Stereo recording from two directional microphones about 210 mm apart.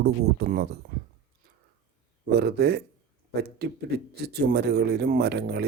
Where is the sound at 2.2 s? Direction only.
50° right (ahead or behind).